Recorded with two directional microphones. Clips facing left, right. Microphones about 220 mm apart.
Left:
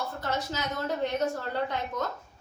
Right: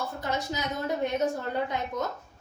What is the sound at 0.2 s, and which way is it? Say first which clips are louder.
A woman's voice: right 1 dB; 15° right (ahead or behind).